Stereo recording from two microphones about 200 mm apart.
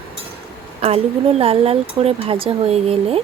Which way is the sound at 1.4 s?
30° right (ahead or behind).